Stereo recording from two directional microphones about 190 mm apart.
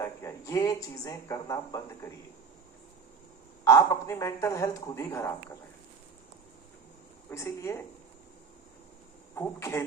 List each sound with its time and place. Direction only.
0.0 s speech: 15° left (ahead or behind)
3.6 s speech: 15° left (ahead or behind)
7.3 s speech: 15° left (ahead or behind)
9.3 s speech: 15° left (ahead or behind)